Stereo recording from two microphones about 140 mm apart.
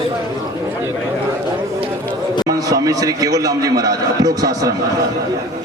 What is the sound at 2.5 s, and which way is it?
A man's voice, 25° right (ahead or behind).